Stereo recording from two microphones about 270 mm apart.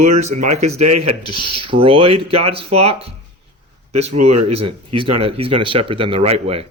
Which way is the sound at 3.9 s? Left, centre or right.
Right.